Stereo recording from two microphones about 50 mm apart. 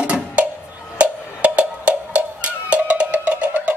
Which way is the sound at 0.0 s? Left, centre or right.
Right.